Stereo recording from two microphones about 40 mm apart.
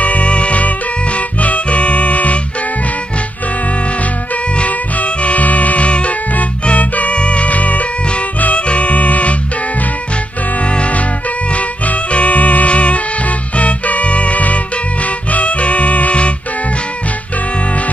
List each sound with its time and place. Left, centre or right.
0.0 s music: left
4.6 s music: left
10.7 s music: left